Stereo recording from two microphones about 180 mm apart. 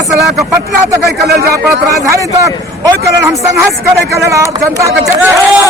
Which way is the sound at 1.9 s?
20° right (ahead or behind).